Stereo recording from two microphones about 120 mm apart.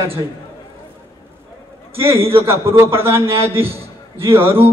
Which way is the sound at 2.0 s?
20° right (ahead or behind).